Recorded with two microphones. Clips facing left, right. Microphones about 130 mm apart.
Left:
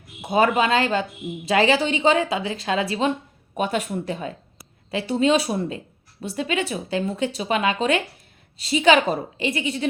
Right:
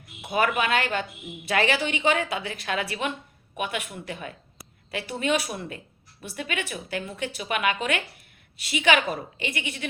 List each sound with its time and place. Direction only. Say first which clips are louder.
0.2 s a woman's voice: left 5 dB; 25° left (ahead or behind)